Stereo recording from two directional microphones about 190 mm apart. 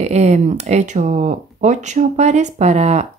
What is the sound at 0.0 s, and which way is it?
Speech, 35° right (ahead or behind).